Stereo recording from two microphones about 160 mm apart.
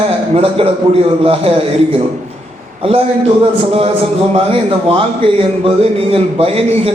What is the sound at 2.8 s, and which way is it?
Speech, 35° right (ahead or behind).